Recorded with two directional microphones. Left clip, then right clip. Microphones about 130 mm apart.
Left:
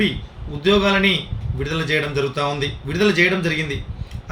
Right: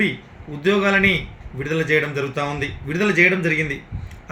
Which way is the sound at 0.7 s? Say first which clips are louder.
Left 1 dB; 15° right (ahead or behind).